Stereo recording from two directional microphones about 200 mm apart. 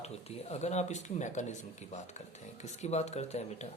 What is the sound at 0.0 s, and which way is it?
Speech, 30° left (ahead or behind).